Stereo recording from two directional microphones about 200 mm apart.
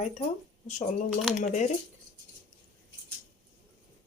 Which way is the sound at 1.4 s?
35° left (ahead or behind).